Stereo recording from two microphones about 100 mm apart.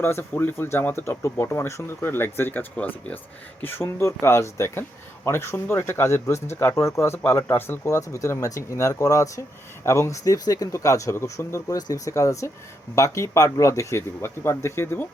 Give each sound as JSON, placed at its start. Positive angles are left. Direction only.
{"t": 0.0, "sound": "speech", "side_deg": 25}